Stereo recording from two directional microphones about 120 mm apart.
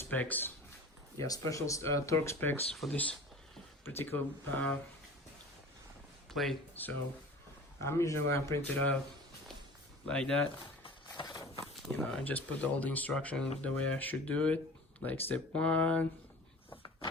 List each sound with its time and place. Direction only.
0.0 s speech: 15° left (ahead or behind)
1.2 s speech: 25° left (ahead or behind)
6.3 s speech: centre (ahead or behind)
6.8 s speech: 15° left (ahead or behind)
10.1 s speech: 5° left (ahead or behind)
11.2 s a sound: 30° left (ahead or behind)
11.9 s speech: 15° left (ahead or behind)